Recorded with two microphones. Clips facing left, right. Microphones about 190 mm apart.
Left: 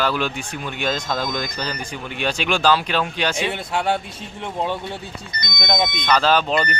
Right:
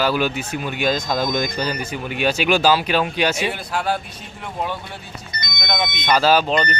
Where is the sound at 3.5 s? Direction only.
25° left (ahead or behind).